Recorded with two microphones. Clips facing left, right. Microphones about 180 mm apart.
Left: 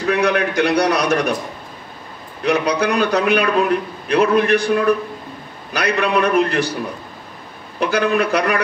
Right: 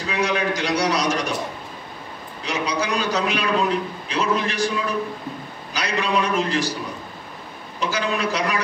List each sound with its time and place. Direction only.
0.0 s a man's voice: 60° left (ahead or behind)
2.4 s a man's voice: 60° left (ahead or behind)
7.8 s a man's voice: 60° left (ahead or behind)